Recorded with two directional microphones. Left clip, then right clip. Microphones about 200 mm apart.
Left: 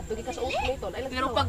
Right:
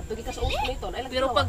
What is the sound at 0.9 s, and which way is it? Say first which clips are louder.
Speech: right 5 dB; 25° right (ahead or behind).